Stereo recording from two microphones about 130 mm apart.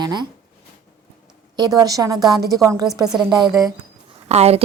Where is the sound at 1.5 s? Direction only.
30° right (ahead or behind).